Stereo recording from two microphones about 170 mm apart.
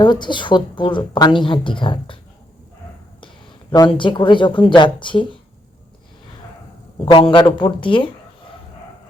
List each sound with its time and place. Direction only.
0.0 s a woman's voice: 25° left (ahead or behind)
3.7 s a woman's voice: 30° left (ahead or behind)
7.0 s a woman's voice: 30° left (ahead or behind)